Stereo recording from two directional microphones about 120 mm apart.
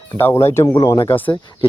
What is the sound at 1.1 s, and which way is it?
Speech, 15° left (ahead or behind).